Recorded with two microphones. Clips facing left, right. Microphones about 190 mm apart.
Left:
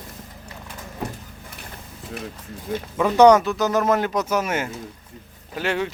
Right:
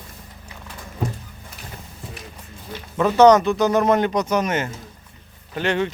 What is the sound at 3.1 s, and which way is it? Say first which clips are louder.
Speech: even; 10° left (ahead or behind).